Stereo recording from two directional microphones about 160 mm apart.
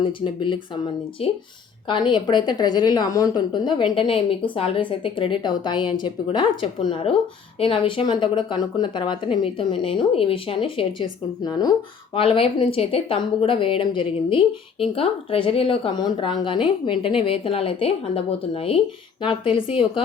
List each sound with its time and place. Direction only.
0.0 s speech: 30° left (ahead or behind)
12.1 s speech: 35° left (ahead or behind)